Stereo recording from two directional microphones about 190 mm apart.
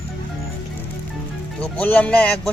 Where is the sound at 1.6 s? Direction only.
10° left (ahead or behind).